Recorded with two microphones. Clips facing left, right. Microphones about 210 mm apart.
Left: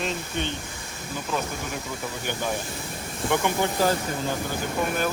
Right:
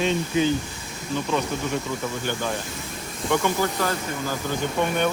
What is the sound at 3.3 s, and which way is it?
Speech, 15° left (ahead or behind).